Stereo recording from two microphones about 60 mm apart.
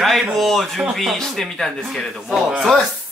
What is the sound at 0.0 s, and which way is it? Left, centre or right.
Speech, centre.